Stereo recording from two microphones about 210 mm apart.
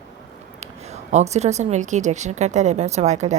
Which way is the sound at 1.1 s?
30° right (ahead or behind).